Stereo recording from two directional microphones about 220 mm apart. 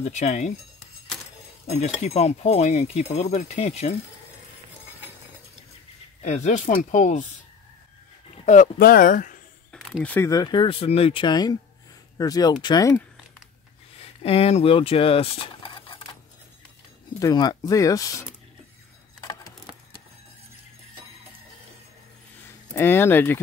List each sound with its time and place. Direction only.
0.0 s speech: 30° left (ahead or behind)
2.0 s speech: 30° left (ahead or behind)
6.2 s speech: 30° left (ahead or behind)
8.5 s speech: 40° left (ahead or behind)
9.7 s speech: 5° left (ahead or behind)
14.2 s speech: 25° left (ahead or behind)
17.2 s speech: 20° left (ahead or behind)
22.8 s speech: 10° left (ahead or behind)